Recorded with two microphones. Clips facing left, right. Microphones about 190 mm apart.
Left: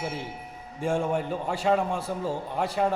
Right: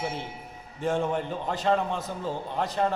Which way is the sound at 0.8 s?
10° left (ahead or behind).